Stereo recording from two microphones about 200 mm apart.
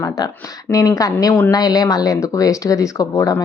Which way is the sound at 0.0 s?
15° left (ahead or behind).